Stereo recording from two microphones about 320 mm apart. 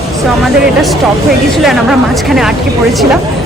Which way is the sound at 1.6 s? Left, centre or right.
Centre.